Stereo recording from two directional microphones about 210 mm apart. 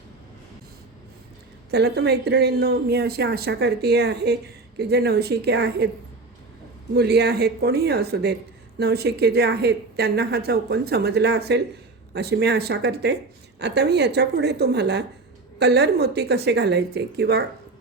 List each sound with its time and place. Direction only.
1.7 s speech: 50° right (ahead or behind)
6.9 s speech: 50° right (ahead or behind)